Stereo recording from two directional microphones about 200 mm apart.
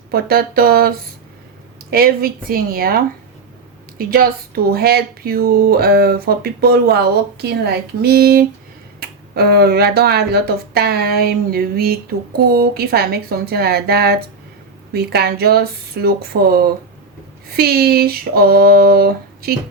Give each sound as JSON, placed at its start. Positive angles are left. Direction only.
{"t": 0.1, "sound": "speech", "side_deg": -50}